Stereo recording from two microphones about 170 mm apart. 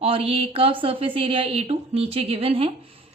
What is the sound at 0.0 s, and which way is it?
A woman's voice, 35° right (ahead or behind).